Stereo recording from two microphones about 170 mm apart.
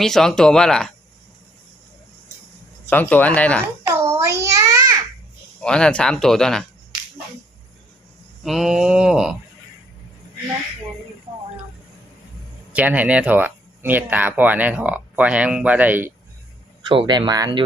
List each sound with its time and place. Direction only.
0.0 s speech: centre (ahead or behind)
2.8 s speech: 10° left (ahead or behind)
3.9 s child singing: 15° right (ahead or behind)
5.5 s speech: 5° left (ahead or behind)
8.4 s speech: centre (ahead or behind)
12.7 s speech: 10° right (ahead or behind)
16.9 s speech: 30° right (ahead or behind)